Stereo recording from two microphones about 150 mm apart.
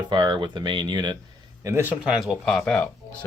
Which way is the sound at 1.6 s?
15° right (ahead or behind).